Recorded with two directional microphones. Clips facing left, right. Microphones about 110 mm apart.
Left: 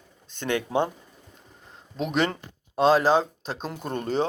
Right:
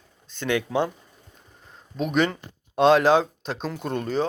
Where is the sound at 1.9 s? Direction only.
25° left (ahead or behind).